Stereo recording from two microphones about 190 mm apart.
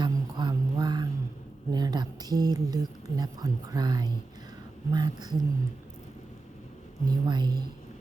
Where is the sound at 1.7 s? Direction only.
20° right (ahead or behind).